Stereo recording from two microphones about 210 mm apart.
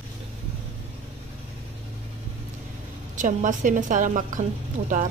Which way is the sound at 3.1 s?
40° right (ahead or behind).